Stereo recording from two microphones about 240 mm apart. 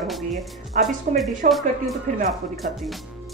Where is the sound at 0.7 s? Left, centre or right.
Right.